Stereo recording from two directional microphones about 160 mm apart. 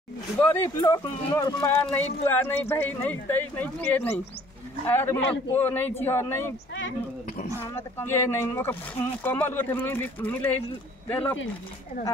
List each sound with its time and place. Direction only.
0.4 s speech: 20° left (ahead or behind)
0.8 s speech: 30° left (ahead or behind)
2.2 s speech: 15° left (ahead or behind)
8.0 s speech: 15° left (ahead or behind)